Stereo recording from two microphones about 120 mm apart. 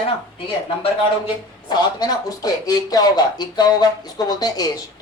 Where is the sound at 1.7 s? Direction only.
35° left (ahead or behind).